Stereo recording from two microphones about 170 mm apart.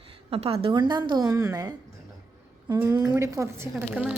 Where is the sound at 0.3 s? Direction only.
35° right (ahead or behind).